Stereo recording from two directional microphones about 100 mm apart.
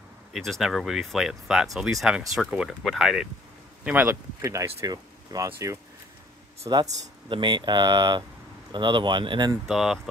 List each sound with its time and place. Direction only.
0.3 s speech: centre (ahead or behind)
4.1 s speech: 30° right (ahead or behind)
6.7 s speech: 50° right (ahead or behind)
9.7 s speech: 5° right (ahead or behind)